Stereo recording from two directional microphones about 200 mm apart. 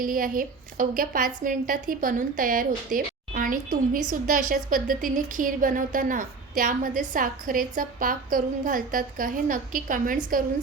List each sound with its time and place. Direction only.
0.0 s a woman's voice: 45° right (ahead or behind)